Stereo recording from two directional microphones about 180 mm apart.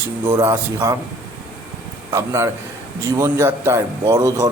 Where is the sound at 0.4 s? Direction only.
15° right (ahead or behind).